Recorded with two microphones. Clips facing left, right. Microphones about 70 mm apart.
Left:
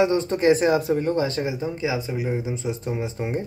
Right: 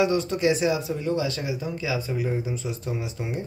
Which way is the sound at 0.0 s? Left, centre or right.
Left.